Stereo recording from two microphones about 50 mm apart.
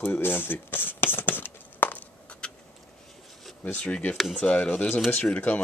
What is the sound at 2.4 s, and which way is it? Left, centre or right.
Vehicle, centre.